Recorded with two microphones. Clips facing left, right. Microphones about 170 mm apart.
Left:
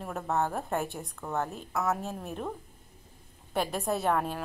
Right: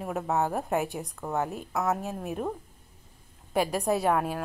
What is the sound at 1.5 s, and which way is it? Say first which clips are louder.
A woman's voice: right 2 dB; centre (ahead or behind).